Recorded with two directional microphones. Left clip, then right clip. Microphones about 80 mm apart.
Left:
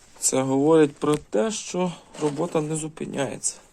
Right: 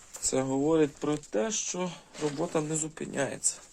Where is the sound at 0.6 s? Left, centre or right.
Left.